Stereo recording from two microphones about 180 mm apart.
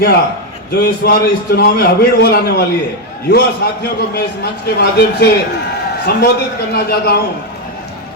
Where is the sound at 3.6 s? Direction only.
60° left (ahead or behind).